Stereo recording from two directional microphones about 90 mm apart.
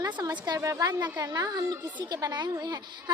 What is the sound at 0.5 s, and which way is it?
A woman's voice, 40° right (ahead or behind).